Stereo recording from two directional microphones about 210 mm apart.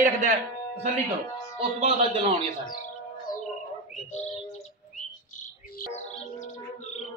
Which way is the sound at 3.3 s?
40° left (ahead or behind).